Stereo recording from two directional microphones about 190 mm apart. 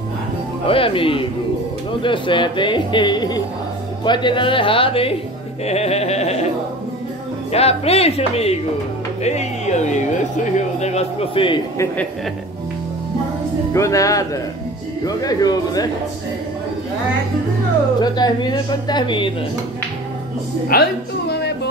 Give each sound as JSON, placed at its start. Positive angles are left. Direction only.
{"t": 0.7, "sound": "speech", "side_deg": 30}
{"t": 7.5, "sound": "speech", "side_deg": 30}
{"t": 13.7, "sound": "speech", "side_deg": 15}
{"t": 18.0, "sound": "speech", "side_deg": 20}
{"t": 20.7, "sound": "a woman's voice", "side_deg": 55}